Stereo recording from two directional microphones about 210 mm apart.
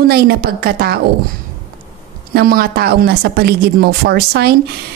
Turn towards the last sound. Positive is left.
turn(degrees=-50)  # may be behind; listen again after turning